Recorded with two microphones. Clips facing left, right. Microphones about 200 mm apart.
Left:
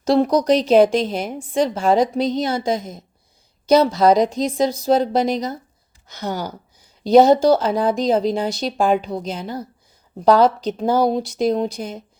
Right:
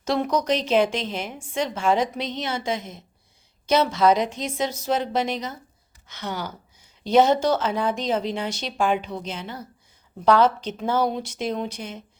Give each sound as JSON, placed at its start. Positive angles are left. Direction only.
{"t": 0.0, "sound": "a woman's voice", "side_deg": 35}